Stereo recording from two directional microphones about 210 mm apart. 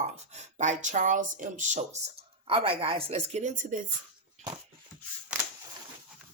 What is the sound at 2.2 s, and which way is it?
Speech, 25° right (ahead or behind).